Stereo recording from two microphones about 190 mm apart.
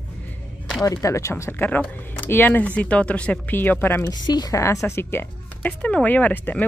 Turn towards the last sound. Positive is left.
turn(degrees=10)  # may be behind; listen again after turning